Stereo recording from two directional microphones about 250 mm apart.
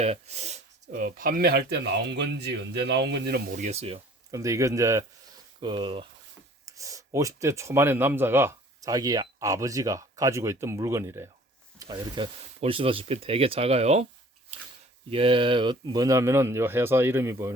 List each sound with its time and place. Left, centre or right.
0.0 s speech: right
15.1 s speech: right